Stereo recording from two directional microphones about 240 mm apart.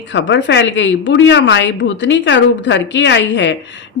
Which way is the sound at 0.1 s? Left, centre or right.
Left.